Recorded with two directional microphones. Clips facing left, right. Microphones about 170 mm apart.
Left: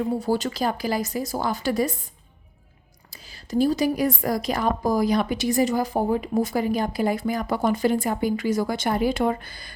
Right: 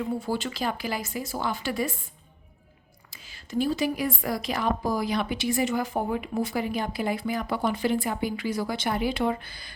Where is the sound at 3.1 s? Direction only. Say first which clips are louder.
Left 7 dB; 40° left (ahead or behind).